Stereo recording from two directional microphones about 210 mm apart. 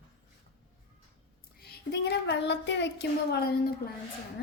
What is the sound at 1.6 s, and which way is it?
A woman's voice, 50° left (ahead or behind).